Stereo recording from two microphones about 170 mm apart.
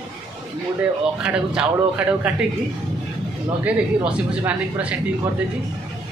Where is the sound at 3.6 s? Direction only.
5° right (ahead or behind).